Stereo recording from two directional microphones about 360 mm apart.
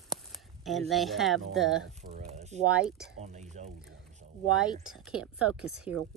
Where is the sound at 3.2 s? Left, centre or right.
Centre.